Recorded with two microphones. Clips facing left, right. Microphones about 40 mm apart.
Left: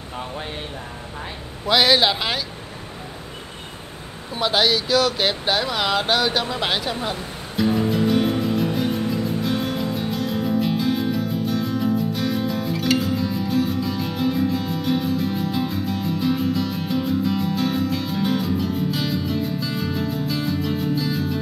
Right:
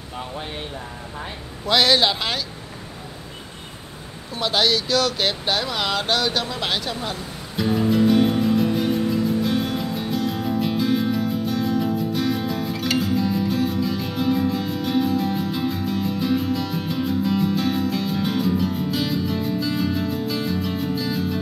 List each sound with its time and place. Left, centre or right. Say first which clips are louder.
1.7 s speech: left 1 dB; centre
4.4 s speech: left 1 dB; centre
7.5 s music: even; centre